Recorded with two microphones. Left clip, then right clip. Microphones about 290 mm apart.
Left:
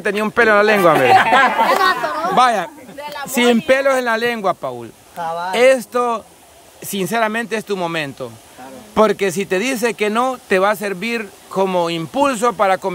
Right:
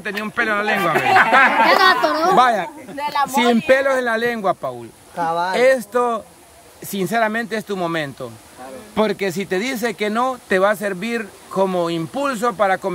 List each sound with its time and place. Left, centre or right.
0.0 s speech: centre
1.7 s speech: right
2.3 s speech: centre
3.0 s speech: centre
3.3 s speech: centre
5.2 s speech: right
5.5 s speech: centre